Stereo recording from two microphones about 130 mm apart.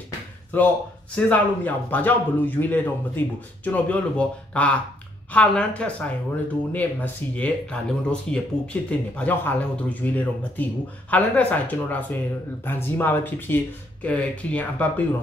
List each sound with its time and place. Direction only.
0.5 s a man's voice: 15° left (ahead or behind)